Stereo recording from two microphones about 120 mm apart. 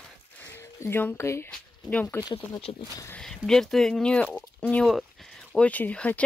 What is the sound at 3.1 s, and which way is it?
Speech, 5° left (ahead or behind).